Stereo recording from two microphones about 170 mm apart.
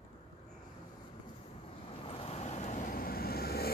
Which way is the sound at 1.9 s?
35° left (ahead or behind).